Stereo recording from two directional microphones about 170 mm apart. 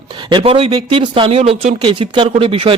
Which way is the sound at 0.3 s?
30° right (ahead or behind).